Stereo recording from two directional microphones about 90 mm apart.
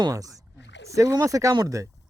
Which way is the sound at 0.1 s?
40° right (ahead or behind).